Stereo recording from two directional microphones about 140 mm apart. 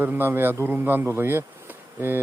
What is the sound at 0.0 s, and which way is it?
Speech, 15° right (ahead or behind).